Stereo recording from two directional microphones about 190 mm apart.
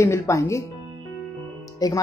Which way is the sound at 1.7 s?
20° left (ahead or behind).